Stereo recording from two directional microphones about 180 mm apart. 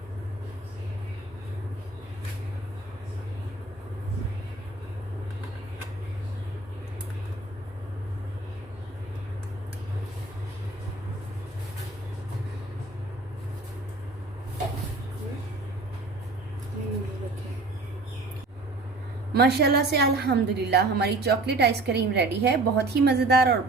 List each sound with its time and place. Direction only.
19.3 s a woman's voice: 65° right (ahead or behind)